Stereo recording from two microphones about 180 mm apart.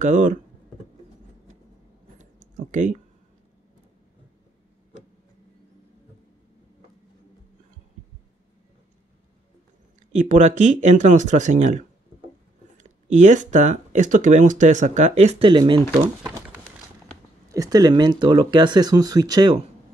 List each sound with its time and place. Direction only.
0.0 s speech: 45° right (ahead or behind)
2.4 s a sound: 45° right (ahead or behind)
10.1 s speech: 40° right (ahead or behind)
13.1 s speech: 40° right (ahead or behind); by 15.8 s 25° right (ahead or behind)
17.5 s speech: 20° right (ahead or behind)